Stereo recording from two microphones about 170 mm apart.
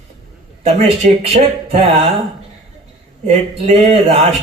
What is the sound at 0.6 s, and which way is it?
Speech, 35° right (ahead or behind).